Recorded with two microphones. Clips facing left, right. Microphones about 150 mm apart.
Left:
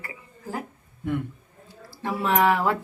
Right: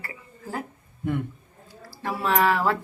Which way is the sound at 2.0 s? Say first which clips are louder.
Left 1 dB; 20° left (ahead or behind).